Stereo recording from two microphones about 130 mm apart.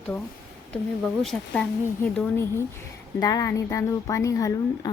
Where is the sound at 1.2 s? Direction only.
5° left (ahead or behind).